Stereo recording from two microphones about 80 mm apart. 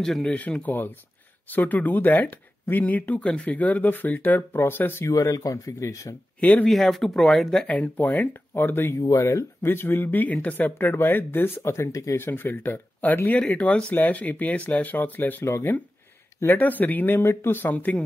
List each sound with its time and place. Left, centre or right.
0.0 s speech: centre; by 5.0 s left
5.0 s speech: left
6.4 s speech: centre
6.7 s speech: centre
7.6 s speech: centre
9.0 s speech: left
9.6 s speech: left